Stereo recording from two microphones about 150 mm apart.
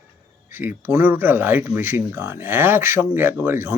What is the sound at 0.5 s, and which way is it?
Speech, 15° right (ahead or behind).